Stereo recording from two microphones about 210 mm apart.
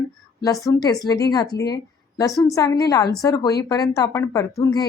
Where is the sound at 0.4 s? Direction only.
15° left (ahead or behind).